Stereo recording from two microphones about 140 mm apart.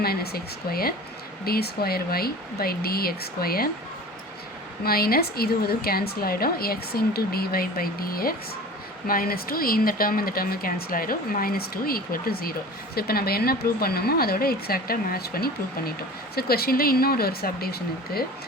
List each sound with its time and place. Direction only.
0.0 s speech: 90° left
4.9 s speech: 90° left